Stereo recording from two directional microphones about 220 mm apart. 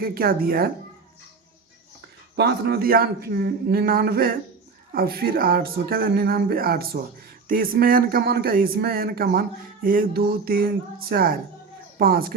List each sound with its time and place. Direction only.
0.0 s speech: 40° right (ahead or behind)
2.3 s a woman's voice: 50° right (ahead or behind)